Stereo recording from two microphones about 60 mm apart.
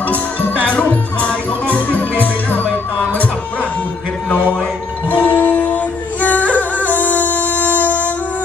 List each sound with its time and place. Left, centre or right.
0.7 s music: left
5.1 s music: left